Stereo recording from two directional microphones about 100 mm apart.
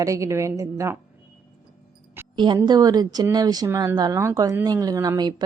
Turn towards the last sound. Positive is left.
turn(degrees=-40)  # may be behind; listen again after turning